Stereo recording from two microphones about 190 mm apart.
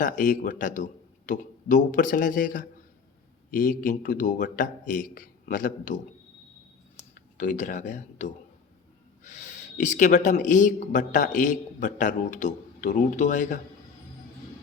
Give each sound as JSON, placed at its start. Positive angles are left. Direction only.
{"t": 0.0, "sound": "a man's voice", "side_deg": 45}
{"t": 7.1, "sound": "speech", "side_deg": 40}